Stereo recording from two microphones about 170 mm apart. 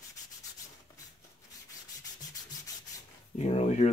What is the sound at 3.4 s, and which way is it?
Speech, 40° left (ahead or behind).